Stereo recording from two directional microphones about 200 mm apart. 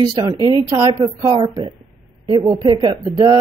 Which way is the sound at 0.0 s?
20° right (ahead or behind).